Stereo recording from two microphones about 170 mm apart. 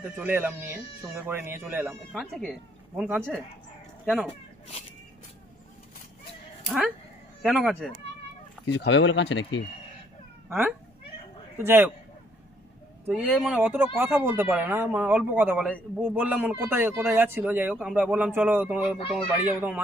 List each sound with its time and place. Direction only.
0.2 s speech: 10° right (ahead or behind)
3.0 s speech: 10° right (ahead or behind)
4.3 s speech: 40° left (ahead or behind)
7.4 s speech: centre (ahead or behind)
8.6 s speech: 90° left
11.5 s speech: 15° right (ahead or behind)
13.0 s speech: 5° right (ahead or behind)
13.6 s speech: 10° right (ahead or behind)